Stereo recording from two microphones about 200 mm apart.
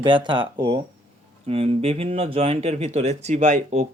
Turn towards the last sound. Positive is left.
turn(degrees=-35)  # may be behind; listen again after turning